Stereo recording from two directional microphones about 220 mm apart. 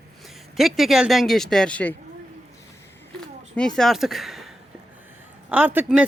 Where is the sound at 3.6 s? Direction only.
Centre (ahead or behind).